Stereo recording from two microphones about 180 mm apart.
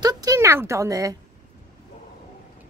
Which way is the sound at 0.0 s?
20° right (ahead or behind).